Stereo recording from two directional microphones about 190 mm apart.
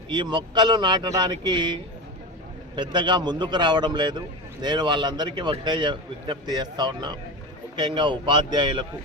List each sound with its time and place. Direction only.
0.1 s a man's voice: 25° right (ahead or behind)